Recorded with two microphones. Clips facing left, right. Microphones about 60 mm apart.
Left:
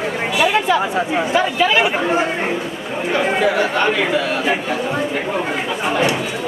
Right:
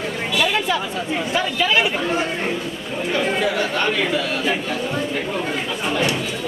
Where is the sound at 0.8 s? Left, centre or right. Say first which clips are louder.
Left 6 dB; left.